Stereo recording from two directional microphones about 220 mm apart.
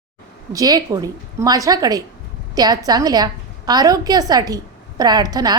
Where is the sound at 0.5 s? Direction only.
15° right (ahead or behind).